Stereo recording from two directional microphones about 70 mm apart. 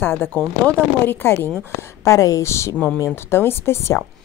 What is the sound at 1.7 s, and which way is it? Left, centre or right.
Speech, left.